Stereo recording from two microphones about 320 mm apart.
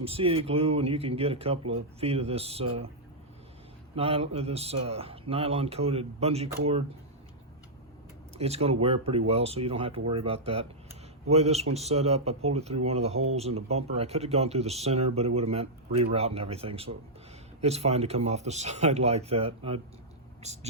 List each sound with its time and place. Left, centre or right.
0.0 s speech: centre
3.9 s speech: centre
8.4 s speech: centre